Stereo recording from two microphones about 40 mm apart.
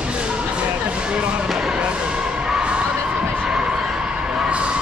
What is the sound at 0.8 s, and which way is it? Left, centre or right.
Music, right.